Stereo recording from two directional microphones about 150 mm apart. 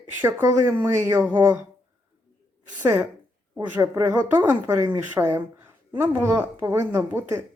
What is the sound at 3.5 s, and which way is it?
A woman's voice, 10° right (ahead or behind).